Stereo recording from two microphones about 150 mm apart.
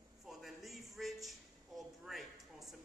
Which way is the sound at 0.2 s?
Centre (ahead or behind).